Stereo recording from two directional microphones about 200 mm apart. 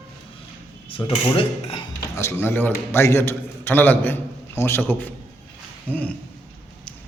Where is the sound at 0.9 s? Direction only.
25° left (ahead or behind).